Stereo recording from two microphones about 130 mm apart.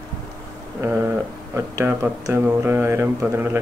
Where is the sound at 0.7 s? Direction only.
15° right (ahead or behind).